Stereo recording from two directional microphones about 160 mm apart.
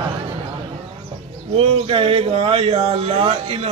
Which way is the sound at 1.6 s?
35° right (ahead or behind).